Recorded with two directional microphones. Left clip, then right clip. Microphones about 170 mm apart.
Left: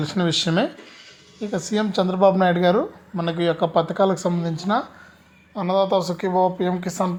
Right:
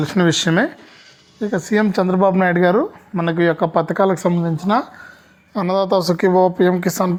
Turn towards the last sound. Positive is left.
turn(degrees=-50)  # may be behind; listen again after turning